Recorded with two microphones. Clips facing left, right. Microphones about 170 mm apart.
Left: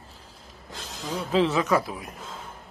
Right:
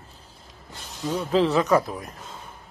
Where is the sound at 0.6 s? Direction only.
90° left.